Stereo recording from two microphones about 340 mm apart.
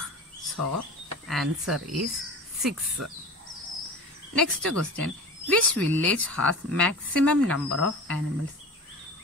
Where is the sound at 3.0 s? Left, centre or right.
Right.